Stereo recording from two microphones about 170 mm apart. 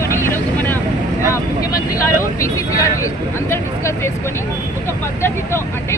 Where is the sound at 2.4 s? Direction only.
20° left (ahead or behind).